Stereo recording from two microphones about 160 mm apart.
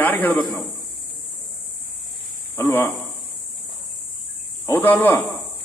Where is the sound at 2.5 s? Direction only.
15° left (ahead or behind).